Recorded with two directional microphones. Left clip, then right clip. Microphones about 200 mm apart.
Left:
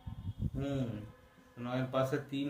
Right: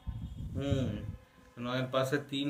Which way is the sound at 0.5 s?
25° right (ahead or behind).